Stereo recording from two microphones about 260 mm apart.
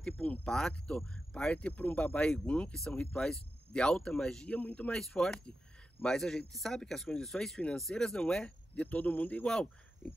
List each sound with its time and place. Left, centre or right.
0.0 s speech: centre